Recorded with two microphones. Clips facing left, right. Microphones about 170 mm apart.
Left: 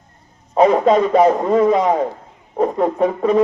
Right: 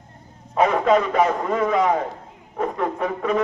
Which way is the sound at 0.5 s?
35° left (ahead or behind).